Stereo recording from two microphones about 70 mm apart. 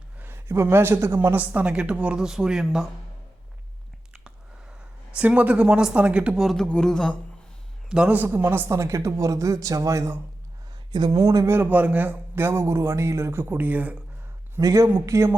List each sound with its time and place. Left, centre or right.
0.2 s speech: right
1.4 s speech: right
5.1 s a woman's voice: centre
6.3 s speech: centre
6.6 s a sound: centre
7.9 s a man's voice: centre
8.3 s a man's voice: right
8.7 s speech: right
11.2 s speech: right
11.4 s a man's voice: right
14.6 s speech: right